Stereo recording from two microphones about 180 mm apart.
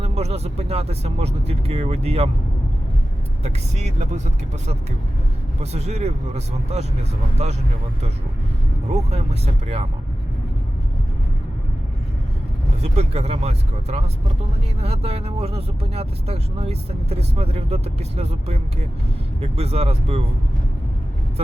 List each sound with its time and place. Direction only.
0.0 s speech: 35° right (ahead or behind)
3.4 s speech: 40° right (ahead or behind)
5.5 s speech: 35° right (ahead or behind)
8.9 s speech: 35° right (ahead or behind)
12.8 s speech: 35° right (ahead or behind)